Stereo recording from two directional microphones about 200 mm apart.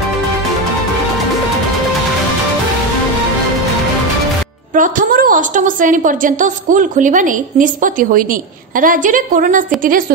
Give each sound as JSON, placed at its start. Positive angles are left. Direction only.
{"t": 4.7, "sound": "a woman's voice", "side_deg": -40}